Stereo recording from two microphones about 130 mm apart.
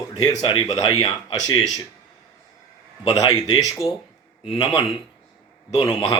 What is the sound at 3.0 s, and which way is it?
Speech, 30° left (ahead or behind).